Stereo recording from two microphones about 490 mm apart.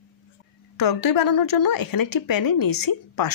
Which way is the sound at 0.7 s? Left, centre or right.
Left.